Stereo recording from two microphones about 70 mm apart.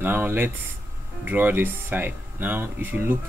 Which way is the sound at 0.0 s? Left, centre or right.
Right.